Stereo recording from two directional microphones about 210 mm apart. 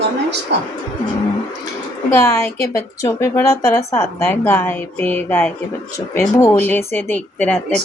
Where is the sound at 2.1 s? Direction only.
10° left (ahead or behind).